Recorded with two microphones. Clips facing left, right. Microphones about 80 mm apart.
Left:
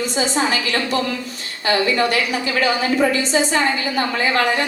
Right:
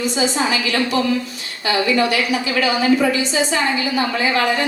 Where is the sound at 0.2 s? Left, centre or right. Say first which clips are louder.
Left 1 dB; left.